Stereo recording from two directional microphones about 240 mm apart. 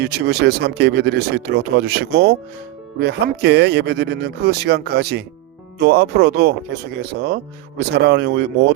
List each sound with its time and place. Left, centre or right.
0.0 s speech: right
7.9 s speech: right